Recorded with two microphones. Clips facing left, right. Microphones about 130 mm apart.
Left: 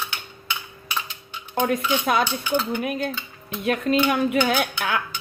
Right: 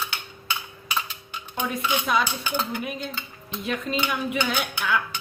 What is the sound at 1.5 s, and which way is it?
Dishes, 65° left (ahead or behind).